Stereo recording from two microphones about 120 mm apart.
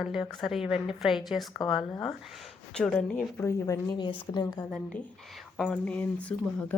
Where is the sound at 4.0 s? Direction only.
40° left (ahead or behind).